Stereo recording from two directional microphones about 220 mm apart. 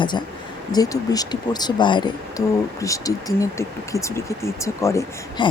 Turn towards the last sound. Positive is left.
turn(degrees=15)  # may be behind; listen again after turning